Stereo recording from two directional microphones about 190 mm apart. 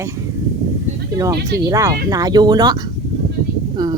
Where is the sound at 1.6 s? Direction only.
20° right (ahead or behind).